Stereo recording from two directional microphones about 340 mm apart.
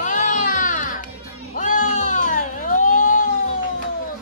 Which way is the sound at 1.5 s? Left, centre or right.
Left.